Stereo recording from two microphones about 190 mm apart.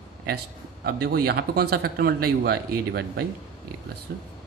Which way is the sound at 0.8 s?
55° right (ahead or behind).